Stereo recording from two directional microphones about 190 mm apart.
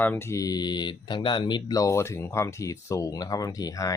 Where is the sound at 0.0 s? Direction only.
10° left (ahead or behind).